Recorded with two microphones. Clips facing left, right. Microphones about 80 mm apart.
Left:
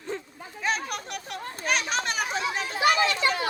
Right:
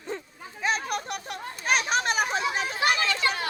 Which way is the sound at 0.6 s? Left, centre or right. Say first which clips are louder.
Right 1 dB; centre.